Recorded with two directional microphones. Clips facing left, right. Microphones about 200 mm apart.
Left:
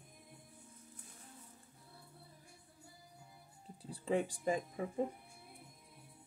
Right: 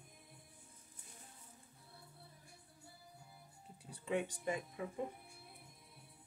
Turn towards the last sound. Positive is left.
turn(degrees=30)  # may be behind; listen again after turning